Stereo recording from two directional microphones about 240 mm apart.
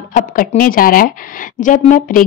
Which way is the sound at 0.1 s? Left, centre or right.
Left.